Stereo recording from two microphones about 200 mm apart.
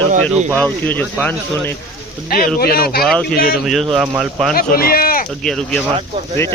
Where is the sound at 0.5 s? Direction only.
10° left (ahead or behind).